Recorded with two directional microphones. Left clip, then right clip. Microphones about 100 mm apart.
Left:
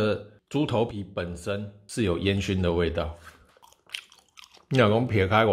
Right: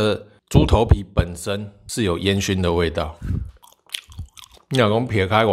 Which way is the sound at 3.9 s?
30° right (ahead or behind).